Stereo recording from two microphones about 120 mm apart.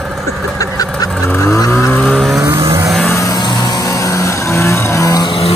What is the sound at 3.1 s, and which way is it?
Music, 30° left (ahead or behind).